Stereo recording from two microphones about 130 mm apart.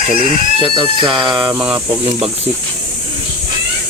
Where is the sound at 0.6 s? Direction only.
40° right (ahead or behind).